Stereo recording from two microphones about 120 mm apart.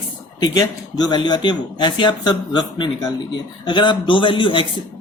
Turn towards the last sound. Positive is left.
turn(degrees=45)  # may be behind; listen again after turning